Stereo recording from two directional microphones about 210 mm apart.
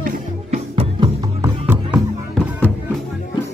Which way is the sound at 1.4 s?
10° right (ahead or behind).